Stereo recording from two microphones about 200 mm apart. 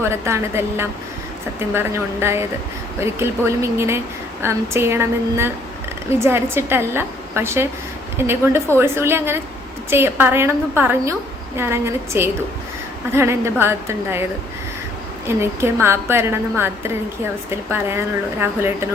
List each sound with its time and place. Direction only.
0.0 s a woman's voice: 15° right (ahead or behind)
15.4 s a woman's voice: 10° right (ahead or behind)